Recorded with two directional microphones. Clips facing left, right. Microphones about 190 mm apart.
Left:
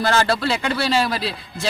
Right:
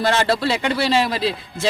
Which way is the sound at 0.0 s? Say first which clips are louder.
Right 1 dB; 20° right (ahead or behind).